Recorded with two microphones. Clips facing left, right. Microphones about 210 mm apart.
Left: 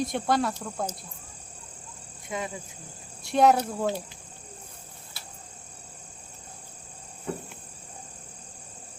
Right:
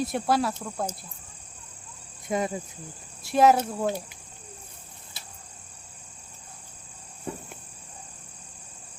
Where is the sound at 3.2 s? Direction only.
Centre (ahead or behind).